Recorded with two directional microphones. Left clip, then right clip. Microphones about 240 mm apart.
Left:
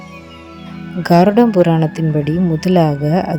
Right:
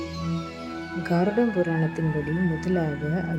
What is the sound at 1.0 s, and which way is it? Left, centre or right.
Speech, left.